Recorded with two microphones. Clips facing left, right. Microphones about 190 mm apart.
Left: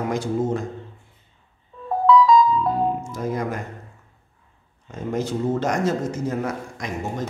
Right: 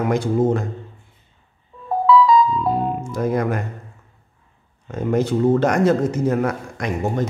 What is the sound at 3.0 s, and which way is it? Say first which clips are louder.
Speech: right 5 dB; 60° right (ahead or behind).